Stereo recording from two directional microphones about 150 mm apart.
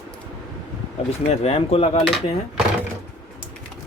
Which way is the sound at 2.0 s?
Centre (ahead or behind).